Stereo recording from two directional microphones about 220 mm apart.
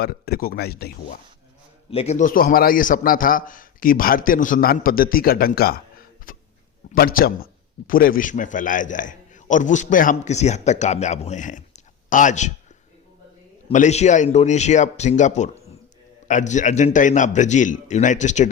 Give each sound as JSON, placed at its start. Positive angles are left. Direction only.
{"t": 0.0, "sound": "a man's voice", "side_deg": 45}
{"t": 1.9, "sound": "a man's voice", "side_deg": 30}
{"t": 6.3, "sound": "a sound", "side_deg": 40}
{"t": 6.9, "sound": "a man's voice", "side_deg": 40}
{"t": 13.7, "sound": "a man's voice", "side_deg": 30}